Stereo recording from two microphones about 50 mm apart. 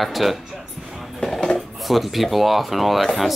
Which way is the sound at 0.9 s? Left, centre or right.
Centre.